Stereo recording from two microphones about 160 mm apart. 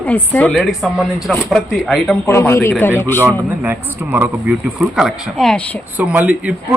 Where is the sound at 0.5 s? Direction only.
Centre (ahead or behind).